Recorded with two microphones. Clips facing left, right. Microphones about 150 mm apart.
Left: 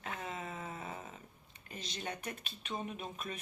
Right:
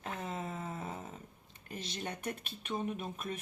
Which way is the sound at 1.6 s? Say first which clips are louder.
Right 2 dB; 55° right (ahead or behind).